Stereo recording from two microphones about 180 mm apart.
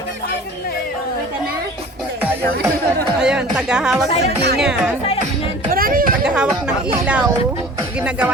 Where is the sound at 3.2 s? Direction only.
5° right (ahead or behind).